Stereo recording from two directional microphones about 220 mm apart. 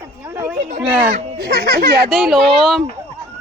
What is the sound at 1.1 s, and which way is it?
Speech, 50° right (ahead or behind).